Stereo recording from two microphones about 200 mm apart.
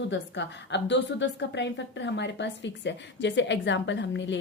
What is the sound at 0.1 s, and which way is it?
A woman's voice, 60° left (ahead or behind).